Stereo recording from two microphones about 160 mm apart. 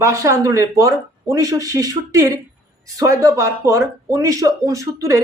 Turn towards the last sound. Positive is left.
turn(degrees=-20)  # may be behind; listen again after turning